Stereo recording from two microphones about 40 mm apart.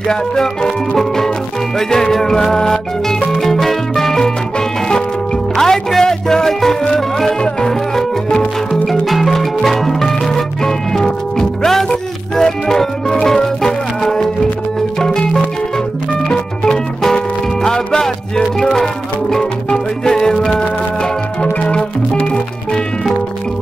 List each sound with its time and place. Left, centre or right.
0.1 s music: centre
9.0 s music: centre
21.4 s music: left